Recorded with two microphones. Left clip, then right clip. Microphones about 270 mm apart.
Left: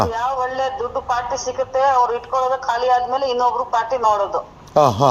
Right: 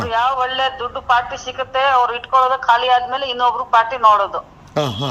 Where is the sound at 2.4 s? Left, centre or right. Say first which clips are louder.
Right 5 dB; right.